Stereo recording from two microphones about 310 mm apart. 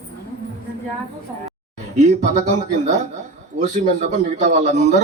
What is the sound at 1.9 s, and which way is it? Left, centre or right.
A man's voice, right.